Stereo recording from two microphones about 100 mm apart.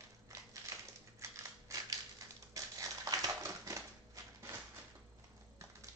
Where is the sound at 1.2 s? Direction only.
35° right (ahead or behind).